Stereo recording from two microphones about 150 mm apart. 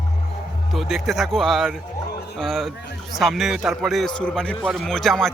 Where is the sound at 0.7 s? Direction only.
Centre (ahead or behind).